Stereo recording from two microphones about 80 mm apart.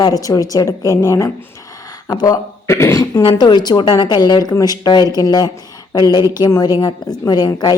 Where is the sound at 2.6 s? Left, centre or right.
Left.